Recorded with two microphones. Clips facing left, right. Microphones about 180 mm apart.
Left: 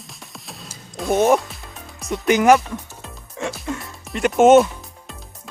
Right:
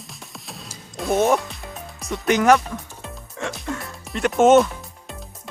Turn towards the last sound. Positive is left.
turn(degrees=5)  # may be behind; listen again after turning